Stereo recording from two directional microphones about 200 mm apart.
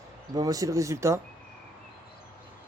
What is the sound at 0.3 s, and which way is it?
Speech, 20° right (ahead or behind).